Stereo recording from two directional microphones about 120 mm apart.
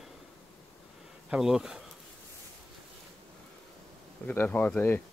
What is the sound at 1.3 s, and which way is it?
Speech, 5° right (ahead or behind).